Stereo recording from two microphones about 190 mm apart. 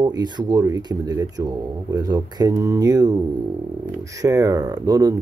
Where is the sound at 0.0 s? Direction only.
20° right (ahead or behind).